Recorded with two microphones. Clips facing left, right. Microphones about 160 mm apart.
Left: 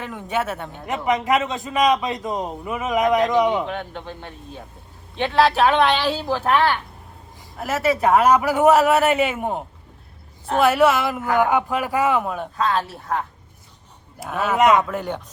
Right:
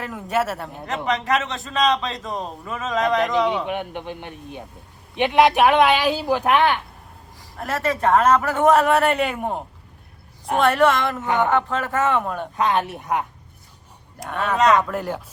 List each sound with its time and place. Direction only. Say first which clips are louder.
0.0 s a man's voice: right 2 dB; centre (ahead or behind)
0.9 s a man's voice: left 2 dB; 20° left (ahead or behind)
3.7 s speech: right 2 dB; 15° right (ahead or behind)
7.5 s a man's voice: left 3 dB; 5° left (ahead or behind)
12.5 s speech: right 2 dB; 20° right (ahead or behind)
14.2 s a man's voice: left 2 dB; centre (ahead or behind)